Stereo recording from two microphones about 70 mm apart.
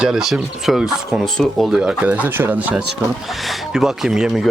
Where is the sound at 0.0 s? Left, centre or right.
Centre.